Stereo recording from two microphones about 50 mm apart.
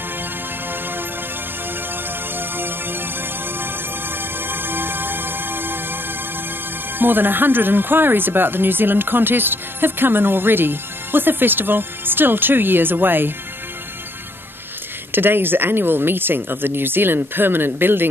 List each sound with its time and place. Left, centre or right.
0.7 s music: right
2.3 s music: right
7.0 s speech: right
15.1 s speech: right